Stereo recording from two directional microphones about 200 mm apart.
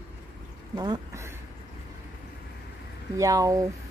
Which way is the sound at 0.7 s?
20° right (ahead or behind).